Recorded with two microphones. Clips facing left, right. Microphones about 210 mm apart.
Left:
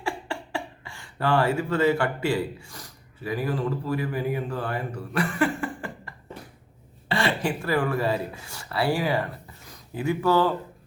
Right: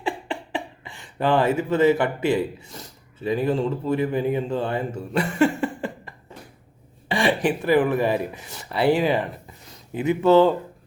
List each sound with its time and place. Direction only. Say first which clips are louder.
0.0 s speech: right 3 dB; 20° right (ahead or behind)